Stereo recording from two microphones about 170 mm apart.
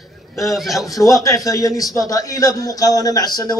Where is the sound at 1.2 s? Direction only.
20° left (ahead or behind).